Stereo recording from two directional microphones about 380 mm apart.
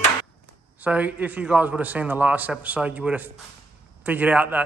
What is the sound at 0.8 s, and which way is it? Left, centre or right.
A man's voice, centre.